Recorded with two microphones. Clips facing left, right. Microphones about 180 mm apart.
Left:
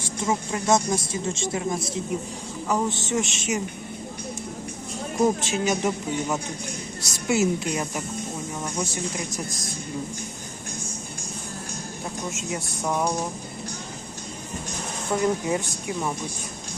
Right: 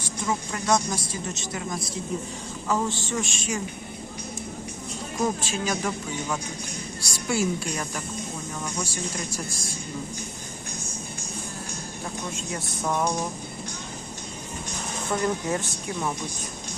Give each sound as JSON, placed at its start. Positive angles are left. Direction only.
{"t": 0.0, "sound": "speech", "side_deg": 25}
{"t": 5.2, "sound": "speech", "side_deg": 20}
{"t": 12.8, "sound": "a sound", "side_deg": 5}
{"t": 15.1, "sound": "speech", "side_deg": 10}